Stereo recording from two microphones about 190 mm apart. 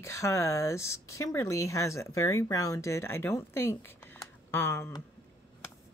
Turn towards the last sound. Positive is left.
turn(degrees=10)  # may be behind; listen again after turning